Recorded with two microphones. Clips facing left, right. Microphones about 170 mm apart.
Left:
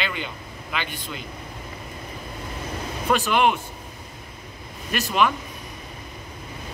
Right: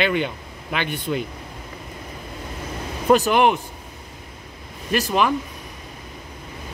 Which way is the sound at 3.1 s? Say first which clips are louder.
Right 6 dB; 40° right (ahead or behind).